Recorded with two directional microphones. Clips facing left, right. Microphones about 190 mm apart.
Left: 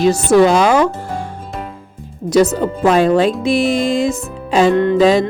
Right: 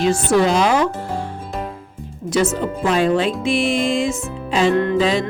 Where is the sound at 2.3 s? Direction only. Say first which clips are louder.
Left 6 dB; 35° left (ahead or behind).